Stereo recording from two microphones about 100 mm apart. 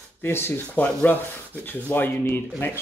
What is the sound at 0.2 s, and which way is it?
Speech, 20° left (ahead or behind).